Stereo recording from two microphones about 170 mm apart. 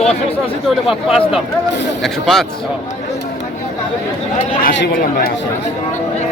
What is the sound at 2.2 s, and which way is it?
Speech, centre (ahead or behind).